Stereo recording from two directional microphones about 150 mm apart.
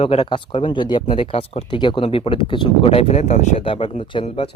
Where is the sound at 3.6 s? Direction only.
35° left (ahead or behind).